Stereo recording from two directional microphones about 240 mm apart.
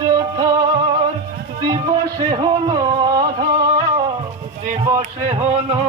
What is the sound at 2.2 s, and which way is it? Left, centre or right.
Speech, centre.